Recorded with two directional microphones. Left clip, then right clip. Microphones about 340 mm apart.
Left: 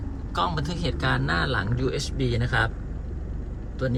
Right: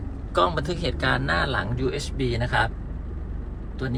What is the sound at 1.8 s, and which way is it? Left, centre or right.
Speech, right.